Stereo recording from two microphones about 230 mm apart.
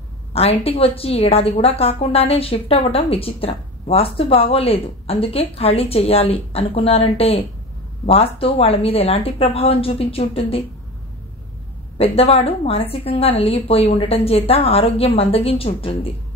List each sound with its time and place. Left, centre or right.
0.3 s a woman's voice: left
12.0 s a woman's voice: left